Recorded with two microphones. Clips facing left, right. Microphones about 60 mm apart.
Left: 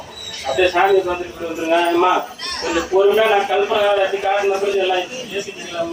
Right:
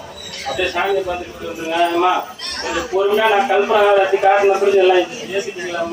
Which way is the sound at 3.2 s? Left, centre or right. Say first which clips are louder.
Right 2 dB; centre.